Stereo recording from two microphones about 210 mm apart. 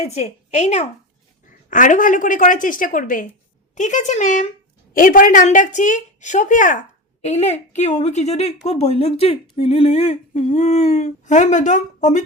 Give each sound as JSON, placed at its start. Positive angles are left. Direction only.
{"t": 0.0, "sound": "a woman's voice", "side_deg": 30}